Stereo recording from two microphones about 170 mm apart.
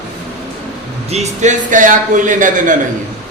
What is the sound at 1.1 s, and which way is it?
A man's voice, 40° right (ahead or behind).